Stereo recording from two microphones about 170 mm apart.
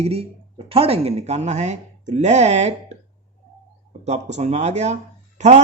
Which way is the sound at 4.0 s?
40° right (ahead or behind).